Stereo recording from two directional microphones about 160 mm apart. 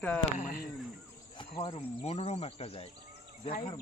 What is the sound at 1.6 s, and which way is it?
Speech, 35° left (ahead or behind).